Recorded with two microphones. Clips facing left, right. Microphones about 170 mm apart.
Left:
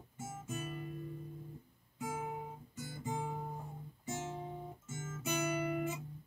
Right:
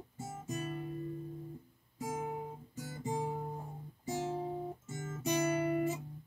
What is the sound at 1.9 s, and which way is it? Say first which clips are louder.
Guitar: right 2 dB; 40° right (ahead or behind).